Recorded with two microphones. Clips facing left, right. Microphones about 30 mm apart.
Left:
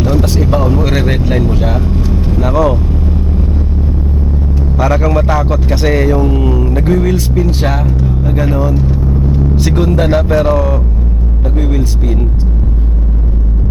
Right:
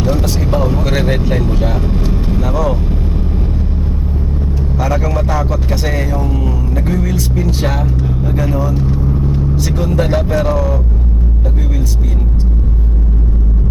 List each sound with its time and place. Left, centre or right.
0.0 s vehicle: centre
1.9 s vehicle: centre
2.4 s vehicle: left
4.8 s speech: left
7.4 s speech: centre
8.3 s speech: centre
8.7 s vehicle: centre
9.6 s speech: left